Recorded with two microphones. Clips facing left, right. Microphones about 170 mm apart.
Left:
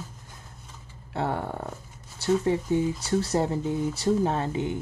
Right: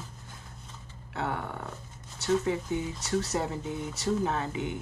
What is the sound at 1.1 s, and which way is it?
Speech, 30° left (ahead or behind).